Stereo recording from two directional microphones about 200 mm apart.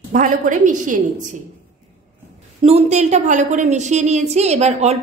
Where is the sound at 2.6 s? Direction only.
35° right (ahead or behind).